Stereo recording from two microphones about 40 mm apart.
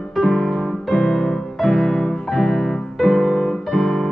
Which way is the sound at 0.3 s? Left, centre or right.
Centre.